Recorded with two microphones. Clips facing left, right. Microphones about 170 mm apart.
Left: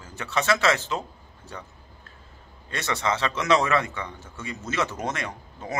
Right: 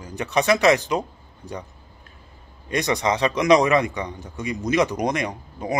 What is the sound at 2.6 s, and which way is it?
A man's voice, 15° right (ahead or behind).